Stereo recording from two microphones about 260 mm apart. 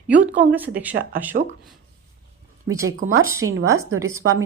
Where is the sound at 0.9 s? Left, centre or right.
Right.